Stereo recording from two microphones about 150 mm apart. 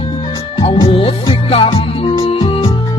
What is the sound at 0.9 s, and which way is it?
Music, 40° left (ahead or behind).